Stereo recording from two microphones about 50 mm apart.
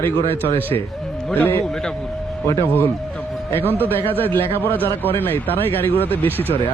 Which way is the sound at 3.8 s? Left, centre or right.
Left.